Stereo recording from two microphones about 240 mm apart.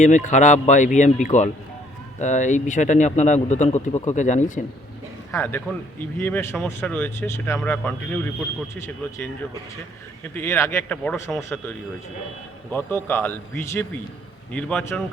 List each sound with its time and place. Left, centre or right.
0.0 s speech: left
5.3 s speech: centre
10.3 s speech: centre
12.7 s a man's voice: centre